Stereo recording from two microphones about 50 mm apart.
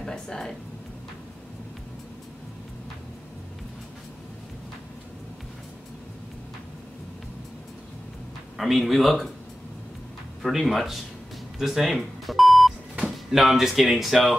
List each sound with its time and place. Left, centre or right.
0.0 s speech: centre
8.5 s speech: centre
10.4 s speech: centre
12.3 s beep: centre
12.9 s telephone dialing: centre
13.4 s speech: centre